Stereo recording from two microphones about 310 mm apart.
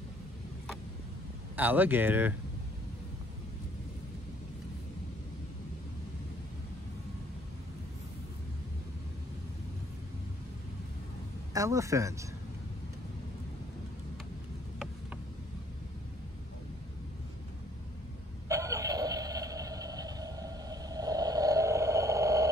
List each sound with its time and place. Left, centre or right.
1.6 s speech: centre
11.5 s speech: centre
18.5 s a sound: centre